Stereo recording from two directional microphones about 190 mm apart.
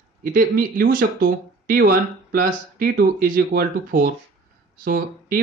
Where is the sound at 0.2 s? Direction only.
45° right (ahead or behind).